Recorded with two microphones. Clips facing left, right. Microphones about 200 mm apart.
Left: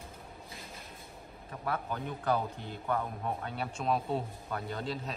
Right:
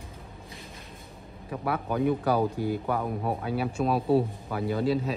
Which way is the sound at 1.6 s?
65° right (ahead or behind).